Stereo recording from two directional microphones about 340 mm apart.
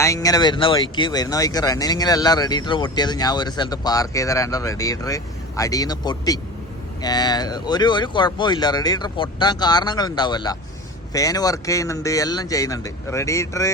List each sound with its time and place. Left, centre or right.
0.0 s speech: centre